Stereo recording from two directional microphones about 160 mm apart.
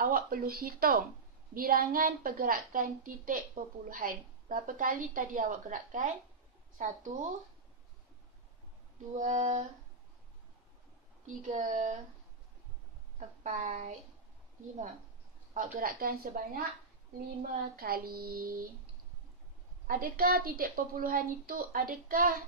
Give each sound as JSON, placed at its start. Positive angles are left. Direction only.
{"t": 0.0, "sound": "a woman's voice", "side_deg": -65}
{"t": 9.2, "sound": "a woman's voice", "side_deg": -45}
{"t": 11.2, "sound": "a woman's voice", "side_deg": -50}
{"t": 13.4, "sound": "a woman's voice", "side_deg": -50}
{"t": 15.5, "sound": "a woman's voice", "side_deg": -60}
{"t": 19.9, "sound": "a woman's voice", "side_deg": -65}